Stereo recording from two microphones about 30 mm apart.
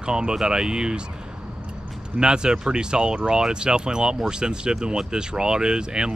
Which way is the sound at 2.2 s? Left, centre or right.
Right.